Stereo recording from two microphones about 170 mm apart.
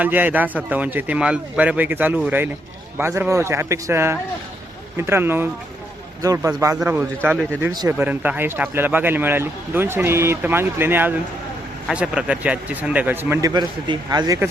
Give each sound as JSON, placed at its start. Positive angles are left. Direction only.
{"t": 0.0, "sound": "a man's voice", "side_deg": -10}
{"t": 7.9, "sound": "speech", "side_deg": -10}
{"t": 13.5, "sound": "a man's voice", "side_deg": -25}